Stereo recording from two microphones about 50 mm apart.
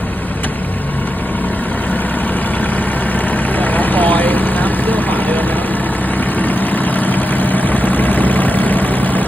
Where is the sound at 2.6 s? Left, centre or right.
Left.